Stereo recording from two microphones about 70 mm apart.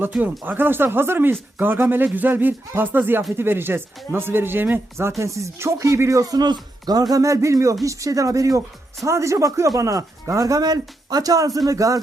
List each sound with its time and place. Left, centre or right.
0.2 s speech: right
5.2 s speech: right